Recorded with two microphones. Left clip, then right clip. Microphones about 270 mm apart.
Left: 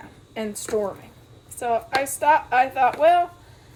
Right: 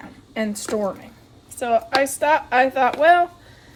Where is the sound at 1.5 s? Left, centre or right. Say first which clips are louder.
Right 4 dB; right.